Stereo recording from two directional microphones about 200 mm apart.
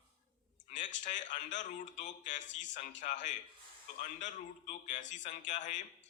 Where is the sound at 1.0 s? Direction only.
40° left (ahead or behind).